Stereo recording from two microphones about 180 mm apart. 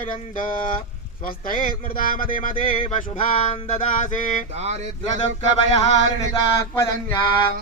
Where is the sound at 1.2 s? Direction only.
50° left (ahead or behind).